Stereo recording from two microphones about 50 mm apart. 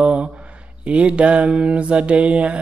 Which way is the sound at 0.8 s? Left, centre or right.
Right.